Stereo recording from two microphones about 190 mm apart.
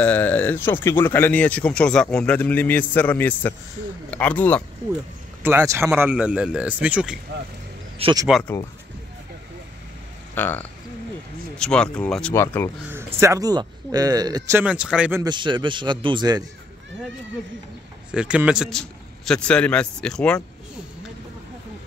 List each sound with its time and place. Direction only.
0.0 s speech: 10° left (ahead or behind)
5.4 s speech: 10° right (ahead or behind)
8.0 s speech: 20° right (ahead or behind)
8.3 s a man's voice: centre (ahead or behind)
10.3 s a man's voice: 10° left (ahead or behind)
12.9 s speech: 15° right (ahead or behind)
14.6 s speech: 5° right (ahead or behind)
15.2 s speech: 25° right (ahead or behind)
18.1 s a man's voice: 5° right (ahead or behind)